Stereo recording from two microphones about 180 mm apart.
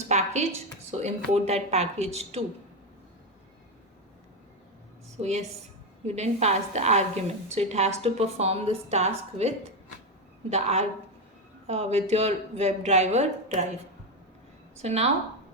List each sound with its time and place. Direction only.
0.1 s a sound: 40° right (ahead or behind)
0.9 s a woman's voice: 40° right (ahead or behind)
5.2 s a woman's voice: 40° right (ahead or behind)
10.5 s a woman's voice: 40° right (ahead or behind)
14.8 s a woman's voice: 35° right (ahead or behind)